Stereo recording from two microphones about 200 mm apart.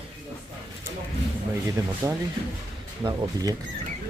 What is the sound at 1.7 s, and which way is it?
Speech, 15° right (ahead or behind).